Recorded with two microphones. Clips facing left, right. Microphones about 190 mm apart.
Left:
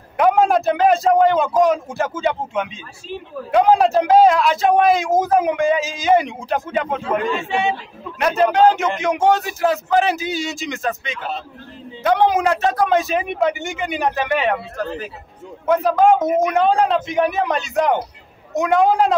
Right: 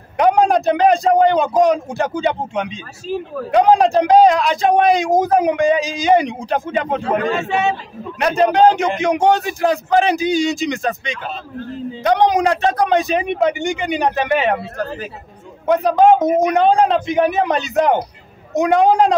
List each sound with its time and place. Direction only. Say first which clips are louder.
0.2 s a man's voice: right 1 dB; centre (ahead or behind)
3.1 s a man's voice: right 8 dB; 40° right (ahead or behind)
3.7 s a man's voice: right 2 dB; 5° left (ahead or behind)
6.9 s a man's voice: right 4 dB; 40° right (ahead or behind)
8.2 s a man's voice: right 2 dB; 5° left (ahead or behind)
15.6 s speech: right 2 dB; 20° right (ahead or behind)
16.2 s a man's voice: right 2 dB; centre (ahead or behind)